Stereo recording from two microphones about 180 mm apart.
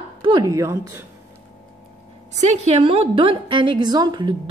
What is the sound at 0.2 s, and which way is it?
Speech, 25° right (ahead or behind).